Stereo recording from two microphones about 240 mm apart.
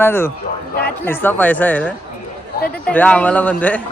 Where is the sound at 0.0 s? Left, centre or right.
Centre.